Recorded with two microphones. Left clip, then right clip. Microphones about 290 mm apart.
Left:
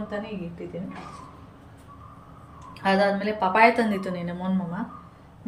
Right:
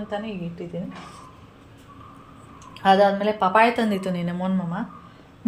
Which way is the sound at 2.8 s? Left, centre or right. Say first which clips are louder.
Right 5 dB; centre.